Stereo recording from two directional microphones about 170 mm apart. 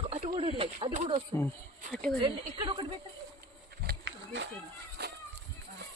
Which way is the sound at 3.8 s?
90° right.